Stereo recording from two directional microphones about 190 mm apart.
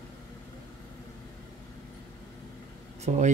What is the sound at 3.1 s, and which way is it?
Speech, 40° right (ahead or behind).